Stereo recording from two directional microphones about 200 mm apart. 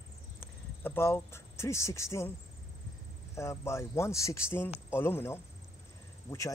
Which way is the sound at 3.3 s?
15° left (ahead or behind).